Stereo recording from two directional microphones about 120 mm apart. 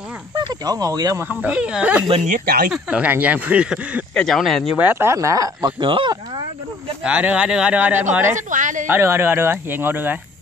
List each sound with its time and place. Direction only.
0.4 s speech: 35° right (ahead or behind)
1.2 s speech: 15° right (ahead or behind)
4.1 s speech: 5° left (ahead or behind)
4.7 s speech: 20° right (ahead or behind)
5.8 s speech: 45° right (ahead or behind)
7.0 s speech: 10° right (ahead or behind)
8.4 s a woman's voice: 90° right
8.8 s speech: 20° right (ahead or behind)